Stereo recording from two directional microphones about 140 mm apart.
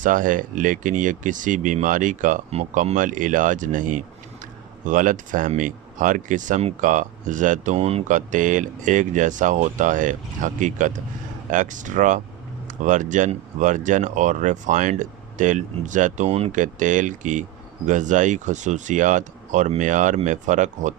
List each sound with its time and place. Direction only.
0.0 s speech: 70° right (ahead or behind)
2.5 s speech: 50° right (ahead or behind)
8.0 s speech: 65° right (ahead or behind)
16.6 s speech: 65° right (ahead or behind)